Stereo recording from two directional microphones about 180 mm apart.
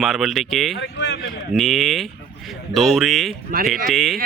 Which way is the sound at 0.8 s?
70° left (ahead or behind).